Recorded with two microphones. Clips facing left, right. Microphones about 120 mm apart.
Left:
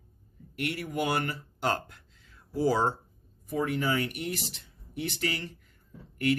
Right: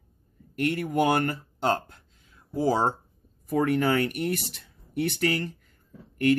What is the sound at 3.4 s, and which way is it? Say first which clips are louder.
Speech: right 6 dB; 65° right (ahead or behind).